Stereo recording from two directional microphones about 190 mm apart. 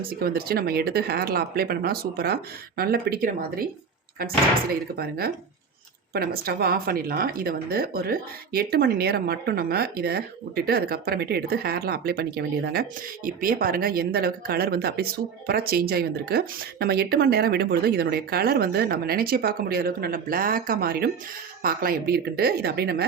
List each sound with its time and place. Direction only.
0.2 s speech: 55° right (ahead or behind)
4.7 s speech: 55° right (ahead or behind)